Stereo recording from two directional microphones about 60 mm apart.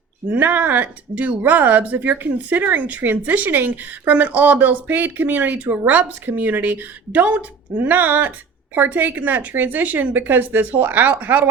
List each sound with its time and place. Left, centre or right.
0.3 s speech: right